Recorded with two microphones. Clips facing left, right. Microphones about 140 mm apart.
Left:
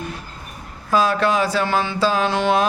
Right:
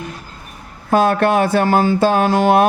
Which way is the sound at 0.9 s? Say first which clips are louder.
Right 4 dB; 55° right (ahead or behind).